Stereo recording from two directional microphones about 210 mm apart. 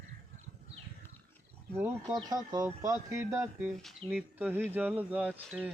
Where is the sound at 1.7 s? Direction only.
15° right (ahead or behind).